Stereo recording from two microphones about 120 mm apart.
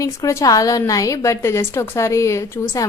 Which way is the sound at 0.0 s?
25° left (ahead or behind).